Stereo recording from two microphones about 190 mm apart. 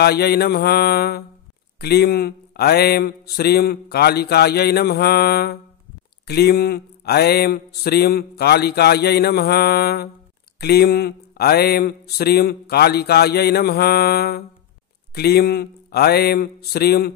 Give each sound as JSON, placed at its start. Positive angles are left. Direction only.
{"t": 0.0, "sound": "speech", "side_deg": 55}